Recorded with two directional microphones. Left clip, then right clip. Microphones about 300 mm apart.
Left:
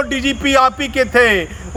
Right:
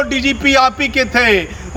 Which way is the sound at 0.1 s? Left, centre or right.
Centre.